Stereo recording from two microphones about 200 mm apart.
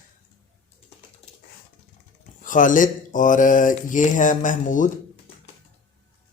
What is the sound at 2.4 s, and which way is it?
Speech, 40° left (ahead or behind).